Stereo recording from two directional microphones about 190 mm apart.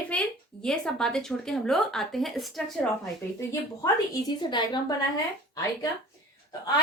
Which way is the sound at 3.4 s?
20° left (ahead or behind).